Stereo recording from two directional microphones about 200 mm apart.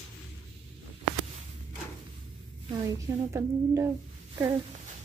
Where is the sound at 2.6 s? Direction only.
15° right (ahead or behind).